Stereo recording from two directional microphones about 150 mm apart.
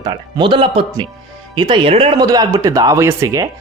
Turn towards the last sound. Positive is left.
turn(degrees=-20)  # may be behind; listen again after turning